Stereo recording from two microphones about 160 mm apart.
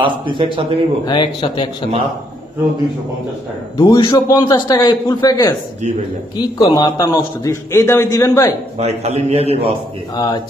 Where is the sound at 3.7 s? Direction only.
20° left (ahead or behind).